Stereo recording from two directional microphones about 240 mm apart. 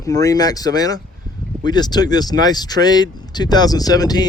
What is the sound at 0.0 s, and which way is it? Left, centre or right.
Speech, centre.